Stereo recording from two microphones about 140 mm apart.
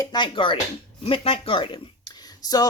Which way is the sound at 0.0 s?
30° left (ahead or behind).